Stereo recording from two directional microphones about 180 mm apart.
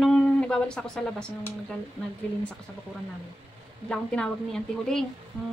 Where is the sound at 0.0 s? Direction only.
5° left (ahead or behind).